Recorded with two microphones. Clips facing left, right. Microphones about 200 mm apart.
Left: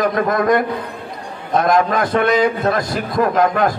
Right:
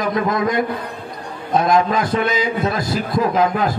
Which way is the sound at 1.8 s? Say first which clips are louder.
Left 3 dB; 60° left (ahead or behind).